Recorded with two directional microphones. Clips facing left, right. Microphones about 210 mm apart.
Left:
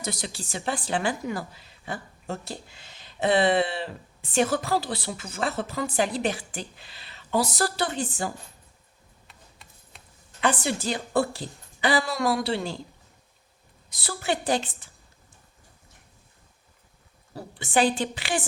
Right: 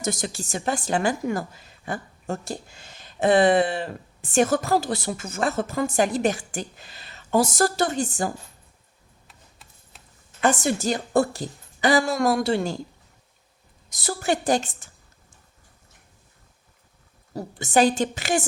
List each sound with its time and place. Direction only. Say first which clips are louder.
0.0 s a woman's voice: right 5 dB; 45° right (ahead or behind)
9.2 s a sound: left 1 dB; centre (ahead or behind)
10.4 s a woman's voice: right 4 dB; 45° right (ahead or behind)
13.9 s a woman's voice: right 4 dB; 45° right (ahead or behind)
17.3 s a woman's voice: right 4 dB; 40° right (ahead or behind)